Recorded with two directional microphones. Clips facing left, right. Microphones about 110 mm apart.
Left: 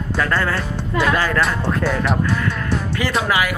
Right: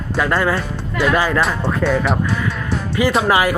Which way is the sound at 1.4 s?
Centre (ahead or behind).